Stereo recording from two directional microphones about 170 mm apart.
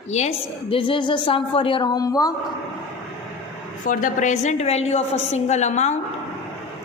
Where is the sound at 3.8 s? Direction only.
50° left (ahead or behind).